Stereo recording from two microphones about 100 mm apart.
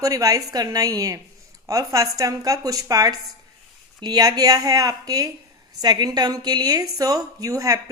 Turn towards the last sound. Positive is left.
turn(degrees=-35)  # may be behind; listen again after turning